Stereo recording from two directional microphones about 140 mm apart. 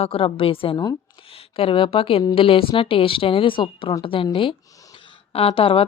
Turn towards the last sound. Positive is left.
turn(degrees=40)  # may be behind; listen again after turning